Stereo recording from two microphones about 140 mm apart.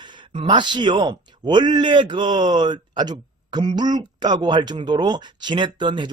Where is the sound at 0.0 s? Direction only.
35° right (ahead or behind).